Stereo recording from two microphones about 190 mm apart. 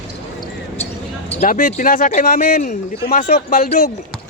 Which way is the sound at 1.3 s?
40° left (ahead or behind).